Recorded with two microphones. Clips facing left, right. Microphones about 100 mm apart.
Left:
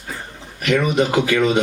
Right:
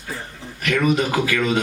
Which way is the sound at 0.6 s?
25° left (ahead or behind).